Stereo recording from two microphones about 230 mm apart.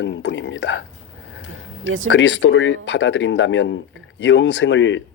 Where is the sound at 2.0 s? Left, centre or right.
Left.